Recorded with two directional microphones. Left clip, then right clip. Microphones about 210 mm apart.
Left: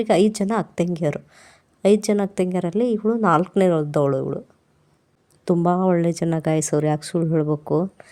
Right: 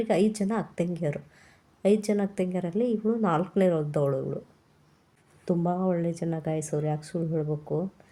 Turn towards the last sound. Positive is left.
turn(degrees=50)  # may be behind; listen again after turning